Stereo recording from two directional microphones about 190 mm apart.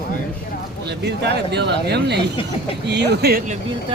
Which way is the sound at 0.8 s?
65° right (ahead or behind).